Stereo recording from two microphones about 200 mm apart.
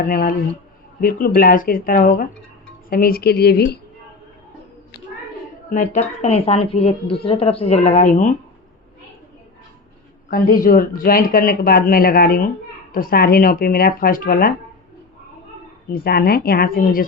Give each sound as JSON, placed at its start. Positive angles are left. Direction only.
{"t": 0.0, "sound": "speech", "side_deg": 45}
{"t": 5.7, "sound": "a woman's voice", "side_deg": 40}
{"t": 10.2, "sound": "speech", "side_deg": 45}
{"t": 15.9, "sound": "speech", "side_deg": 50}